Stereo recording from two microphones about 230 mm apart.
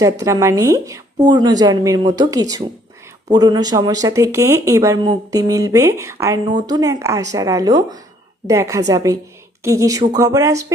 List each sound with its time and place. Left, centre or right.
0.0 s speech: centre